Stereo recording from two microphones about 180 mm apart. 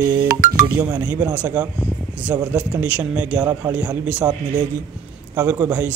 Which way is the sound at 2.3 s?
10° right (ahead or behind).